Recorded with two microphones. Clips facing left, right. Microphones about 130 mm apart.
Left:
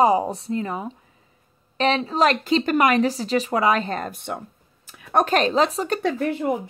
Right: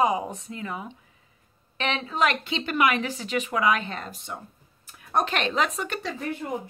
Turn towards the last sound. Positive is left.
turn(degrees=65)  # may be behind; listen again after turning